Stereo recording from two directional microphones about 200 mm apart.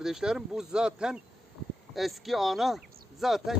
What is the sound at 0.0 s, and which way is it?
Speech, 5° right (ahead or behind).